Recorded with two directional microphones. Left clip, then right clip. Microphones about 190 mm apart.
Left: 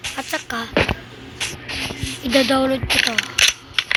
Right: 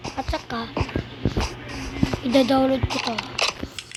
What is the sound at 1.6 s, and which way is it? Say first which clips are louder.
Music: left 3 dB; 25° left (ahead or behind).